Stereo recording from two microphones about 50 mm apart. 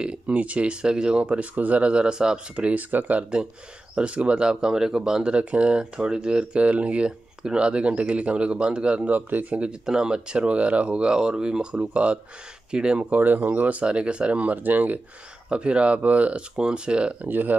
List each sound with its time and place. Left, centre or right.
0.0 s speech: right
2.5 s speech: right
3.9 s speech: right
4.5 s speech: centre
9.1 s speech: right
9.8 s speech: centre
13.1 s speech: right
15.5 s speech: right
16.5 s speech: centre
17.3 s speech: right